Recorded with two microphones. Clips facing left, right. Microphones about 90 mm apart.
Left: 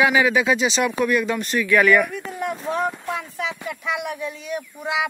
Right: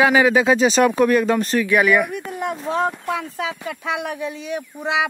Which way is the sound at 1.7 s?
10° right (ahead or behind).